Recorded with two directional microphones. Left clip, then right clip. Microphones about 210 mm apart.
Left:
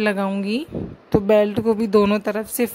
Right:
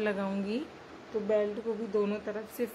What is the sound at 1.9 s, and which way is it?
Speech, 50° left (ahead or behind).